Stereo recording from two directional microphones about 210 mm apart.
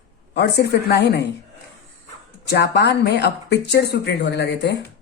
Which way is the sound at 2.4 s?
50° left (ahead or behind).